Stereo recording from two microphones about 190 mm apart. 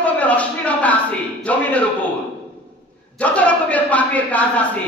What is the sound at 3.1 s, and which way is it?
Speech, 5° left (ahead or behind).